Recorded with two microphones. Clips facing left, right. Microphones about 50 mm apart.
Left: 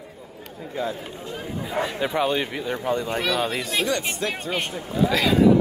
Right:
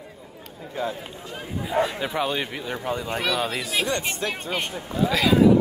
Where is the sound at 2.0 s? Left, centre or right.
Centre.